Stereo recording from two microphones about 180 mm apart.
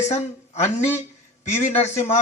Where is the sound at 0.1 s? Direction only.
40° left (ahead or behind).